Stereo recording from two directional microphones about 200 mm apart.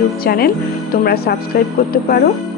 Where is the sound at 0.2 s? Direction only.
50° left (ahead or behind).